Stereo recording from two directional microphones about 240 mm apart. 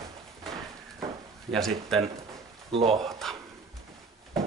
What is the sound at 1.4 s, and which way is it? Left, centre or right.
Speech, centre.